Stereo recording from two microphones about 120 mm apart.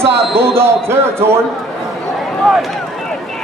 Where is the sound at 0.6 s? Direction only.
20° right (ahead or behind).